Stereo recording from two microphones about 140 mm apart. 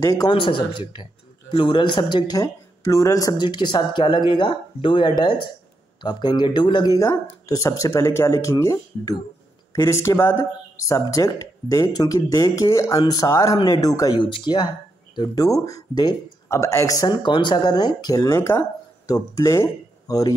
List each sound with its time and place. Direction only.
0.0 s speech: 20° left (ahead or behind)
0.3 s speech: 35° left (ahead or behind)